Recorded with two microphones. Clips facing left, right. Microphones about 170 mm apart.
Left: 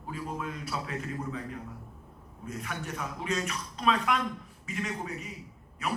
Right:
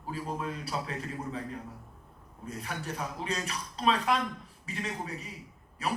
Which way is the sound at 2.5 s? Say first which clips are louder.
Even; 35° right (ahead or behind).